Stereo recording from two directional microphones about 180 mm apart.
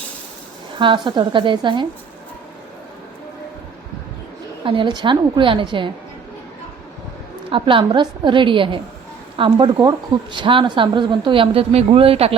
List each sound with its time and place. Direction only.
0.8 s speech: 25° right (ahead or behind)
4.6 s speech: 30° right (ahead or behind)
7.5 s speech: 30° right (ahead or behind)